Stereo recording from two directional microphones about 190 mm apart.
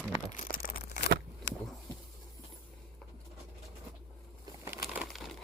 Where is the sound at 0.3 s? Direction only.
45° left (ahead or behind).